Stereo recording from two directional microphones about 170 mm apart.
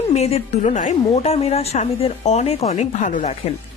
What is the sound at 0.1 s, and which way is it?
Speech, 40° left (ahead or behind).